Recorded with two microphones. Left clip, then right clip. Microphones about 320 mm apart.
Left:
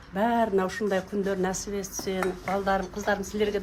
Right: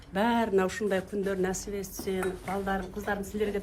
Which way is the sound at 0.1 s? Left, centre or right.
Centre.